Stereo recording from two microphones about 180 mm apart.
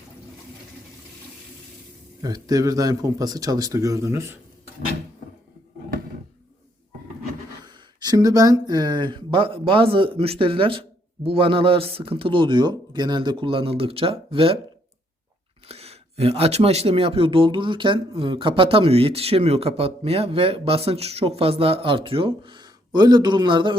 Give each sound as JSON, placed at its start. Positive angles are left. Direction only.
{"t": 2.2, "sound": "speech", "side_deg": -20}
{"t": 7.6, "sound": "speech", "side_deg": -25}
{"t": 15.6, "sound": "speech", "side_deg": -35}